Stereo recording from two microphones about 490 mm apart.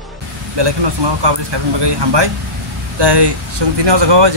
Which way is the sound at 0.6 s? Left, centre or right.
Right.